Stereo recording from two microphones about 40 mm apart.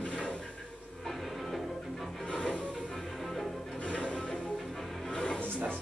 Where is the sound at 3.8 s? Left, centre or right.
Left.